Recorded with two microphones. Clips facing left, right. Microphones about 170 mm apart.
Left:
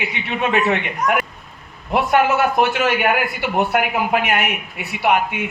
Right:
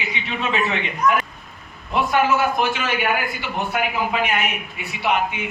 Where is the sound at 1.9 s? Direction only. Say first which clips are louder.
Left 3 dB; 60° left (ahead or behind).